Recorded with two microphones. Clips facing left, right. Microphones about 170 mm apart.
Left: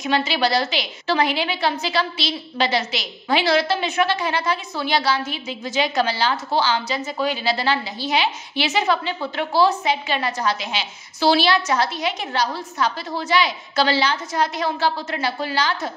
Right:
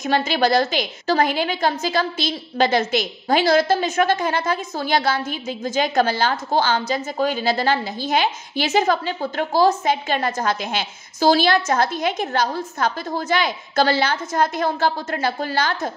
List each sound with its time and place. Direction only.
0.0 s a woman's voice: 45° right (ahead or behind)